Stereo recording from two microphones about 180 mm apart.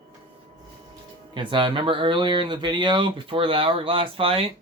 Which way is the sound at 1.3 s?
25° right (ahead or behind).